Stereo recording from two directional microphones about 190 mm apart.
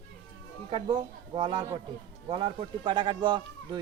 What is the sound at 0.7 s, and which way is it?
Speech, 25° right (ahead or behind).